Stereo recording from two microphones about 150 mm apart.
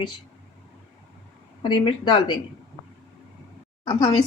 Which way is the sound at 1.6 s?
30° left (ahead or behind).